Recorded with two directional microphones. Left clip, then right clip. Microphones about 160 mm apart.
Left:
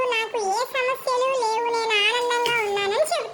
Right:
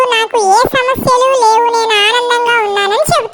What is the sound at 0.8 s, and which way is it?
Child singing, 45° right (ahead or behind).